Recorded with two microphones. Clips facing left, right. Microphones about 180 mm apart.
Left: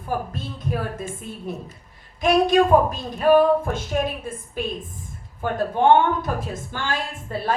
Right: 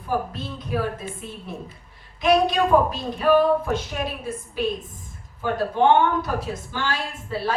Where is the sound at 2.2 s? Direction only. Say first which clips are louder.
Left 2 dB; 45° left (ahead or behind).